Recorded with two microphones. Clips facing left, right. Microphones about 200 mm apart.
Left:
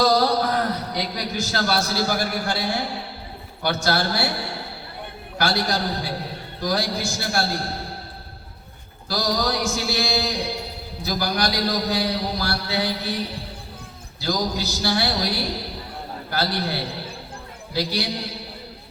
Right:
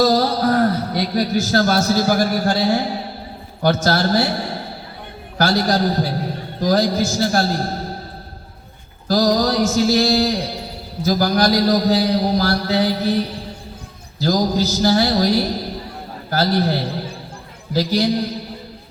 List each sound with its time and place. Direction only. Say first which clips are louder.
0.0 s a man's voice: right 3 dB; 50° right (ahead or behind)
9.0 s a man's voice: right 8 dB; 40° right (ahead or behind)
14.2 s a man's voice: right 7 dB; 45° right (ahead or behind)